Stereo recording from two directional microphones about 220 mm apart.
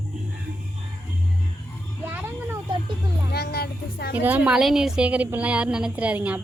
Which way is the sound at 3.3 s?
45° left (ahead or behind).